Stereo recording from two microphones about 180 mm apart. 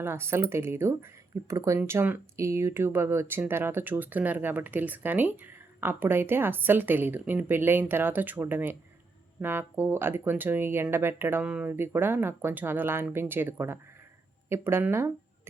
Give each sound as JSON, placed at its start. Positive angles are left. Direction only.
{"t": 0.0, "sound": "speech", "side_deg": -15}